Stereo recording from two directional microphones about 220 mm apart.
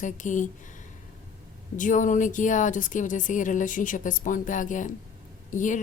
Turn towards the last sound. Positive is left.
turn(degrees=35)  # may be behind; listen again after turning